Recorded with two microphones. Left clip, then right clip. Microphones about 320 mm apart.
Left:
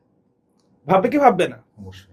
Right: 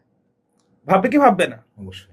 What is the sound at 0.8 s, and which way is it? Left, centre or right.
Speech, centre.